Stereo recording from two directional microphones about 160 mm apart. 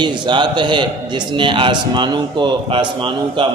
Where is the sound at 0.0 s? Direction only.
30° right (ahead or behind).